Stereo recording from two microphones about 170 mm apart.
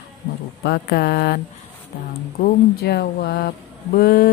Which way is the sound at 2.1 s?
70° left (ahead or behind).